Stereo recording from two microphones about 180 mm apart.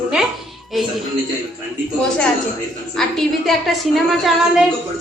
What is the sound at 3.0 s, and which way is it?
A woman's voice, centre (ahead or behind).